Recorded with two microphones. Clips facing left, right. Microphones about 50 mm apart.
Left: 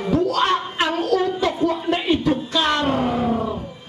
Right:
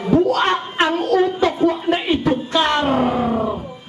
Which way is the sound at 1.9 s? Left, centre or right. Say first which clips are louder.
Right 1 dB; centre.